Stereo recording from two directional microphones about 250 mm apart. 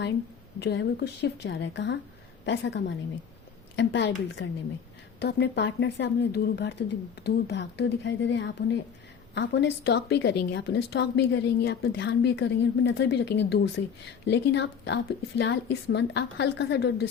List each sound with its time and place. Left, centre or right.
0.6 s a woman's voice: left